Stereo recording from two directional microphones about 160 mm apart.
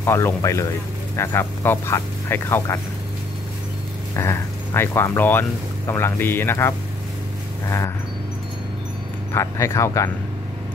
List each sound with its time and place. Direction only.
0.0 s speech: 15° left (ahead or behind)
4.1 s speech: 15° left (ahead or behind)
9.3 s speech: 15° left (ahead or behind)